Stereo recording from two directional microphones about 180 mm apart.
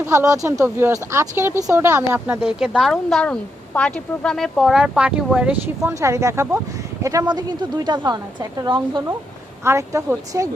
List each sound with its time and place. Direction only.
0.0 s a woman's voice: 15° right (ahead or behind)